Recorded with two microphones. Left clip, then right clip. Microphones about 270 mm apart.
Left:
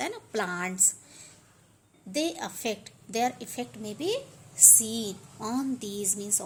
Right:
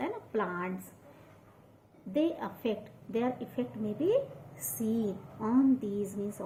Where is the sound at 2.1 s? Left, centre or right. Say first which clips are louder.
Left 1 dB; left.